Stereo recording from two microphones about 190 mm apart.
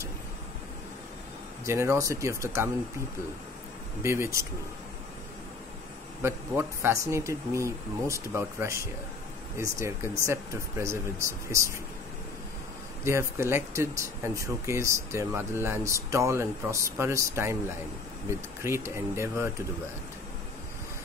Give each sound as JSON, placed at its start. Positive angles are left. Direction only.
{"t": 1.7, "sound": "speech", "side_deg": -15}
{"t": 4.0, "sound": "speech", "side_deg": -15}
{"t": 6.2, "sound": "speech", "side_deg": -10}
{"t": 13.0, "sound": "speech", "side_deg": -15}
{"t": 18.6, "sound": "speech", "side_deg": -15}